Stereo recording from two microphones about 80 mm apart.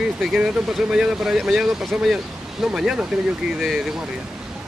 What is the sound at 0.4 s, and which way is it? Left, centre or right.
Speech, centre.